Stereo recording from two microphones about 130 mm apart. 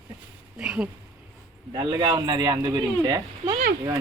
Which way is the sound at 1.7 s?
35° right (ahead or behind).